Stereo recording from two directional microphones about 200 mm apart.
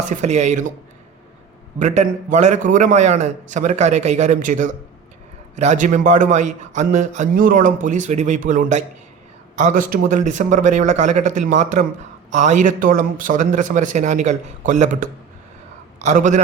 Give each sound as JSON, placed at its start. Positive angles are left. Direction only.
{"t": 0.1, "sound": "a man's voice", "side_deg": -35}
{"t": 1.8, "sound": "a man's voice", "side_deg": -35}